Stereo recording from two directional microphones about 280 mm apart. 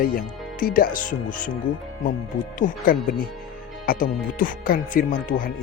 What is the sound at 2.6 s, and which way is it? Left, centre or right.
Speech, left.